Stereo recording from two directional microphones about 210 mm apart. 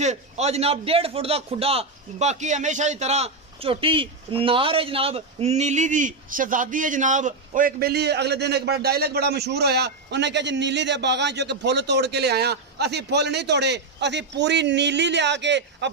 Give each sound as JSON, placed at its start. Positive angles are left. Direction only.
{"t": 0.0, "sound": "a man's voice", "side_deg": -30}